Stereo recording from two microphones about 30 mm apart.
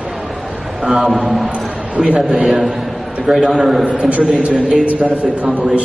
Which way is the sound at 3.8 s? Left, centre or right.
Right.